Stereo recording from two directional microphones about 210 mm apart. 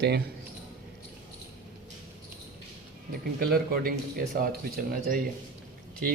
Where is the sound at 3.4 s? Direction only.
45° right (ahead or behind).